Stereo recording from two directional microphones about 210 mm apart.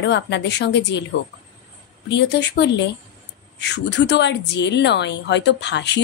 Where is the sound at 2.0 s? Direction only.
55° left (ahead or behind).